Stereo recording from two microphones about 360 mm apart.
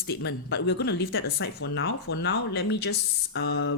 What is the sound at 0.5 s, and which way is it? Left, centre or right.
Speech, left.